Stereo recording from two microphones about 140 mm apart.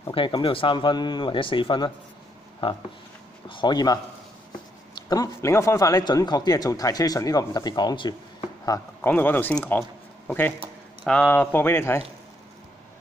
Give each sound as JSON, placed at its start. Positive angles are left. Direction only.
{"t": 0.1, "sound": "speech", "side_deg": 35}
{"t": 3.4, "sound": "a man's voice", "side_deg": 35}
{"t": 8.7, "sound": "speech", "side_deg": 15}